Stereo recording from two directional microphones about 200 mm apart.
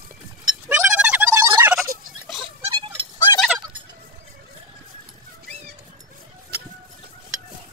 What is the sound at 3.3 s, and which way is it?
Fowl, 20° left (ahead or behind).